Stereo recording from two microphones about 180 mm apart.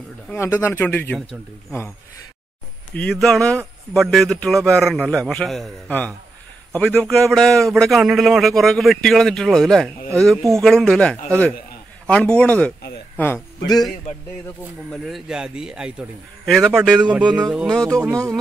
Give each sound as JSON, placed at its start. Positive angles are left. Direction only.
{"t": 0.4, "sound": "speech", "side_deg": 15}
{"t": 2.9, "sound": "a man's voice", "side_deg": 5}
{"t": 14.9, "sound": "a man's voice", "side_deg": 0}